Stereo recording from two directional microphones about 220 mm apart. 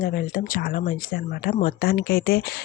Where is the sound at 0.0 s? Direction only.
40° left (ahead or behind).